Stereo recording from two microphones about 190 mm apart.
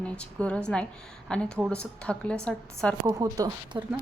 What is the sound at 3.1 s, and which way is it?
Speech, 15° right (ahead or behind).